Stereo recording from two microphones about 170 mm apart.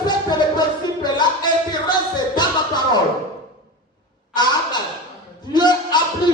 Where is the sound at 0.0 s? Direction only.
25° left (ahead or behind).